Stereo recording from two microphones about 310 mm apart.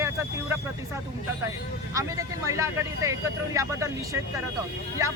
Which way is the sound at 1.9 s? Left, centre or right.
Centre.